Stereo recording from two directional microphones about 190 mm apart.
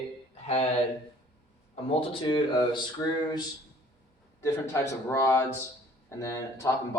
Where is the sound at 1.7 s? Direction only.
25° left (ahead or behind).